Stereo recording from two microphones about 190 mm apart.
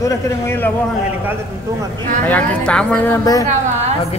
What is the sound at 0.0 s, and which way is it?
Speech, 15° left (ahead or behind).